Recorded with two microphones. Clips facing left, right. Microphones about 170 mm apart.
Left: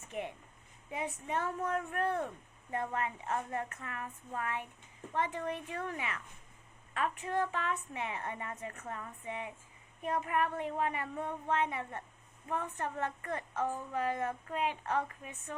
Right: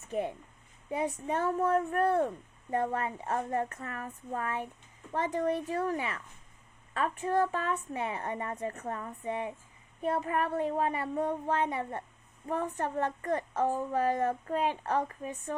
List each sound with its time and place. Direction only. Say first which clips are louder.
0.1 s a child's voice: right 7 dB; 35° right (ahead or behind)